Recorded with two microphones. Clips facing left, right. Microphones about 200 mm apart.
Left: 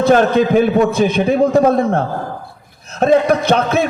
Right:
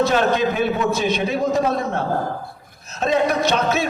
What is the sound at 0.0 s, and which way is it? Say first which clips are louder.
A man's voice: left 6 dB; 55° left (ahead or behind).